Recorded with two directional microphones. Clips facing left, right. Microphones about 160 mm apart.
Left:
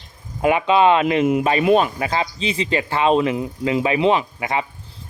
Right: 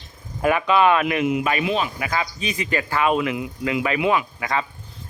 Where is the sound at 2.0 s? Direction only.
30° left (ahead or behind).